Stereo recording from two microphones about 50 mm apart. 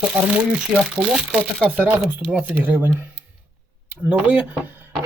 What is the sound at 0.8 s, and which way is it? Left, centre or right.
Speech, centre.